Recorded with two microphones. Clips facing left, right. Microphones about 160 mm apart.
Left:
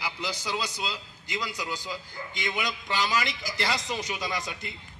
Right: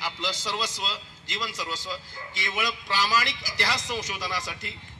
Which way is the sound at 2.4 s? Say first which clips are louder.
Right 1 dB; 20° left (ahead or behind).